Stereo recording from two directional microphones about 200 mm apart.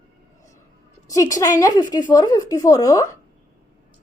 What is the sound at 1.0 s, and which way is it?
A woman's voice, 15° left (ahead or behind).